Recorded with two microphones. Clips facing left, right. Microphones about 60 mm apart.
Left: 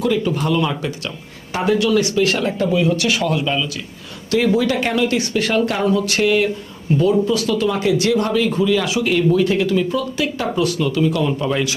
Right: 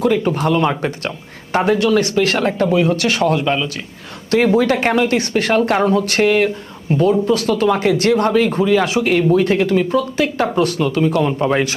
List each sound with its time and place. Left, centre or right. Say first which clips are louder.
0.0 s speech: right 3 dB; right